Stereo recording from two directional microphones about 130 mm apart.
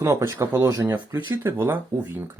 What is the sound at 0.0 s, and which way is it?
Speech, 25° right (ahead or behind).